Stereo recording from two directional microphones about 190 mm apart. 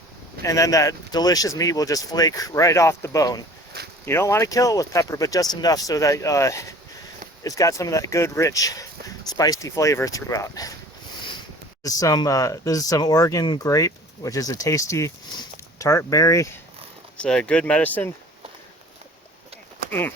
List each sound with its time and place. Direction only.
0.4 s speech: 15° left (ahead or behind)
11.8 s speech: 20° left (ahead or behind)
17.2 s speech: 5° left (ahead or behind)
19.9 s speech: 10° left (ahead or behind)